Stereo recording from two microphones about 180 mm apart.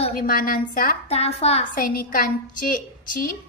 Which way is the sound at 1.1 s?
35° left (ahead or behind).